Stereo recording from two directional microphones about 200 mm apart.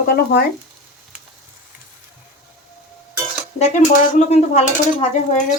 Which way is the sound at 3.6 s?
35° left (ahead or behind).